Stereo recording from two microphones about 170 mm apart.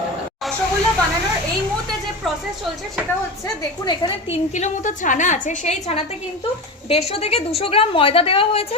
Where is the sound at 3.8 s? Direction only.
30° left (ahead or behind).